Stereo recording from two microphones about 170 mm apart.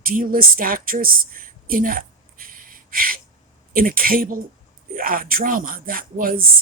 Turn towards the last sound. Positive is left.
turn(degrees=-55)  # may be behind; listen again after turning